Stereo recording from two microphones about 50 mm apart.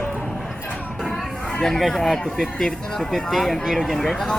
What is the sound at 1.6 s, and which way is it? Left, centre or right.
Speech, centre.